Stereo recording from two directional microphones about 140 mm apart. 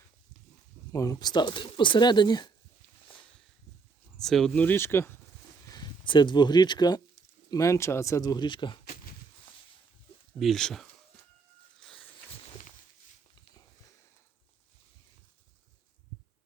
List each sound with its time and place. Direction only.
0.9 s speech: 25° left (ahead or behind)
4.2 s speech: 5° left (ahead or behind)
4.6 s speech: 15° left (ahead or behind)
5.6 s speech: 30° left (ahead or behind)
10.3 s speech: centre (ahead or behind)
11.8 s a sound: centre (ahead or behind)